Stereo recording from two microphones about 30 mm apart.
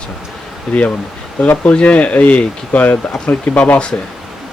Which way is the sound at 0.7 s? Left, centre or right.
Left.